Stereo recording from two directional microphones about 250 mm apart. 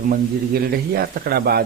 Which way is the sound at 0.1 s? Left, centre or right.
Right.